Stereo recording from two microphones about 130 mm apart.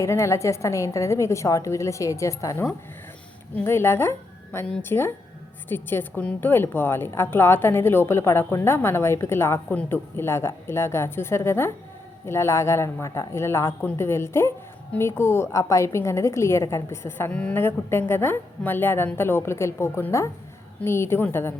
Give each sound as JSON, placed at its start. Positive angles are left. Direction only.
{"t": 0.0, "sound": "a woman's voice", "side_deg": 20}